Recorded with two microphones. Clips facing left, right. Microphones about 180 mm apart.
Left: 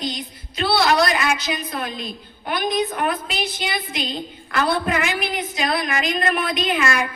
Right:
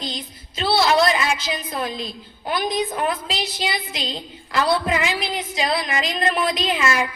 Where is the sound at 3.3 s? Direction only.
90° right.